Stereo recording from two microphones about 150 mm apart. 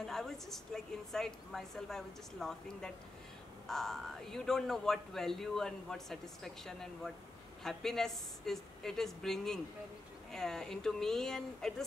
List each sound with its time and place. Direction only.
0.0 s speech: centre (ahead or behind)